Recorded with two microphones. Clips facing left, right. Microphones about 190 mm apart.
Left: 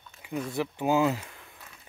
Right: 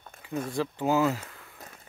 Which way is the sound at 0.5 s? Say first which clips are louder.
Even; 15° left (ahead or behind).